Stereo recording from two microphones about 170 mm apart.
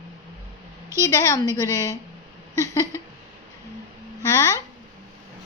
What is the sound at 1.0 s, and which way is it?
A woman's voice, 20° left (ahead or behind).